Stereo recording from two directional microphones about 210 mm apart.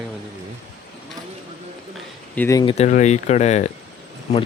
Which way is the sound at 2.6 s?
30° left (ahead or behind).